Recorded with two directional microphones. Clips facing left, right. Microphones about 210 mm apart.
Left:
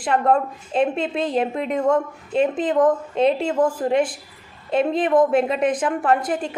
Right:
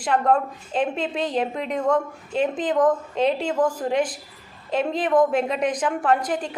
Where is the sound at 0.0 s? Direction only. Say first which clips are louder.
Left 2 dB; 5° left (ahead or behind).